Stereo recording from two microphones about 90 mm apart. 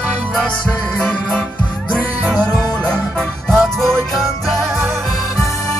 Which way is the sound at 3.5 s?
5° left (ahead or behind).